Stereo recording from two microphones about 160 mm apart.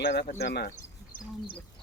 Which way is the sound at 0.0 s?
90° left.